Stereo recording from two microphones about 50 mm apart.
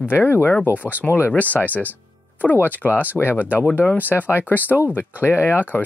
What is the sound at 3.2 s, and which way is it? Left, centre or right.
Speech, left.